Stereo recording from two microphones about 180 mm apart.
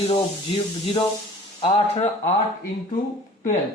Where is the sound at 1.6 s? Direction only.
30° left (ahead or behind).